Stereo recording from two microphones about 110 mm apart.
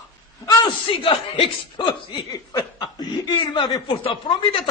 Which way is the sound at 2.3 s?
35° left (ahead or behind).